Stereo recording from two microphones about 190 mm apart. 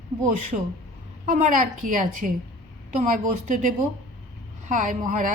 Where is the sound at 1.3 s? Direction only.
40° right (ahead or behind).